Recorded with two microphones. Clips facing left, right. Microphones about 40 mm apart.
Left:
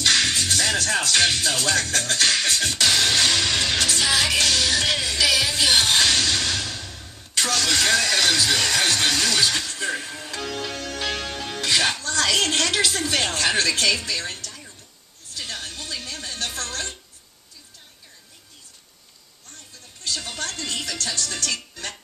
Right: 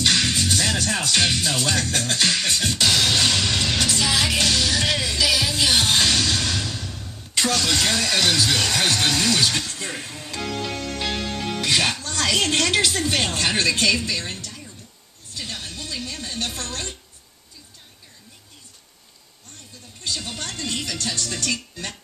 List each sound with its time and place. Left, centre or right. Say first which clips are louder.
0.0 s music: even; centre
2.4 s speech: even; centre
3.3 s music: even; centre
7.3 s vehicle: right 1 dB; centre
7.7 s speech: left 1 dB; centre
11.1 s music: even; centre
11.3 s music: right 3 dB; centre
11.7 s music: even; centre
12.1 s a sound: left 1 dB; centre
13.0 s a woman's voice: even; centre
16.3 s a woman's voice: left 1 dB; centre
20.1 s a woman's voice: even; centre